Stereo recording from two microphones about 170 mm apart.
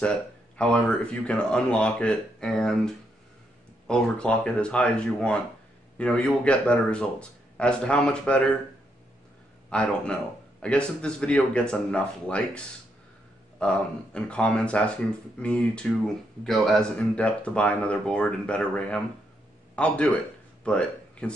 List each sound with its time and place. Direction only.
0.6 s a man's voice: 5° left (ahead or behind)
9.7 s a man's voice: 5° left (ahead or behind)